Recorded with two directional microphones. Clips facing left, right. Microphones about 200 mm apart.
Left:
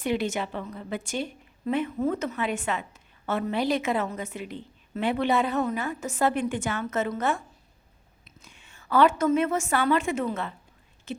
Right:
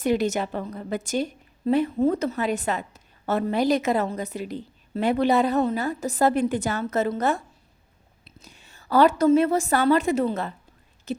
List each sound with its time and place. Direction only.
0.0 s a woman's voice: 40° right (ahead or behind)